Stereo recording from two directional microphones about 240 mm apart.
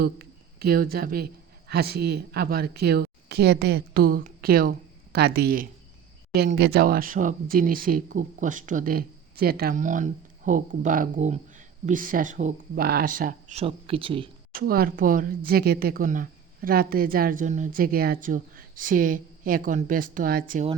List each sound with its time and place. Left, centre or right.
0.0 s speech: right
14.5 s speech: right